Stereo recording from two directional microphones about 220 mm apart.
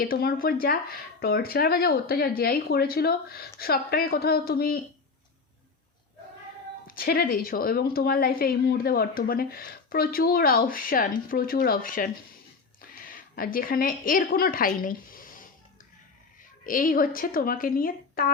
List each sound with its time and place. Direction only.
0.0 s a woman's voice: 40° left (ahead or behind)
6.8 s a woman's voice: 40° left (ahead or behind)
13.1 s a woman's voice: 40° left (ahead or behind)
16.6 s speech: 40° left (ahead or behind)